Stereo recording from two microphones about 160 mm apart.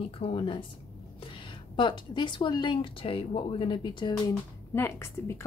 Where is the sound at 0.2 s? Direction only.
35° left (ahead or behind).